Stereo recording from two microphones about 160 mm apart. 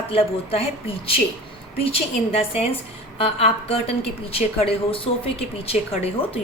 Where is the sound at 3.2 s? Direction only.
40° left (ahead or behind).